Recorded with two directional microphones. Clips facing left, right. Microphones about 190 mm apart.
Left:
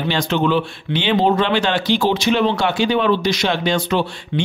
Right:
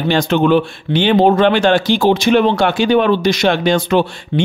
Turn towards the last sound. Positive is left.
turn(degrees=-50)  # may be behind; listen again after turning